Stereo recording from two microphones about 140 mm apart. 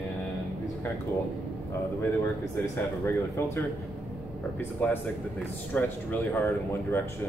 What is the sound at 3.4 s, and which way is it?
Speech, 15° left (ahead or behind).